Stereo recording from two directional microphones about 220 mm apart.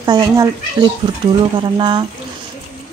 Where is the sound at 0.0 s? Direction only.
20° right (ahead or behind).